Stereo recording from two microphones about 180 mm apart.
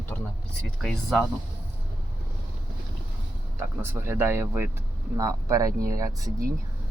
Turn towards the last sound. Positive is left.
turn(degrees=-20)  # may be behind; listen again after turning